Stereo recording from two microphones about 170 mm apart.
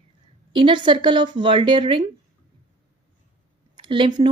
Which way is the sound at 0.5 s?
30° right (ahead or behind).